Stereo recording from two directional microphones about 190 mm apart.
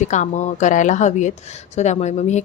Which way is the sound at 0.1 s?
40° left (ahead or behind).